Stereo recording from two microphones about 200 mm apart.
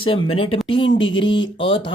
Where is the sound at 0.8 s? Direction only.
70° left (ahead or behind).